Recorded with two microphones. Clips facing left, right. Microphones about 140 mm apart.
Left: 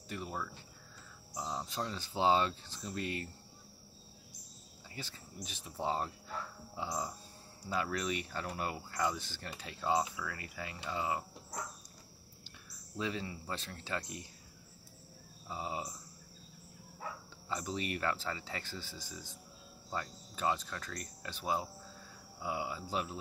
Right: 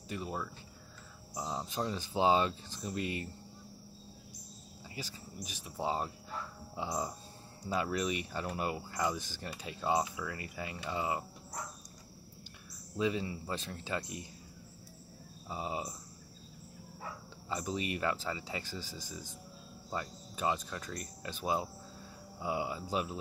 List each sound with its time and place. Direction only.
0.1 s speech: 15° right (ahead or behind)
4.9 s speech: 10° right (ahead or behind)
12.9 s speech: 15° right (ahead or behind)
15.4 s speech: 15° right (ahead or behind)
17.6 s speech: 15° right (ahead or behind)